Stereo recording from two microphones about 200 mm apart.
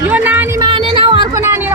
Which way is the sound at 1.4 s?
10° right (ahead or behind).